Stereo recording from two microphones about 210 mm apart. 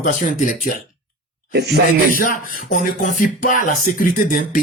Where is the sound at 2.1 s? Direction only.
40° left (ahead or behind).